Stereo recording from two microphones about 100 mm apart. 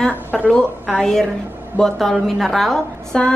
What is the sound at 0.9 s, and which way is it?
A woman's voice, 5° left (ahead or behind).